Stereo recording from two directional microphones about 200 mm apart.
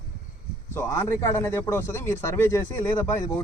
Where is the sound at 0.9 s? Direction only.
15° left (ahead or behind).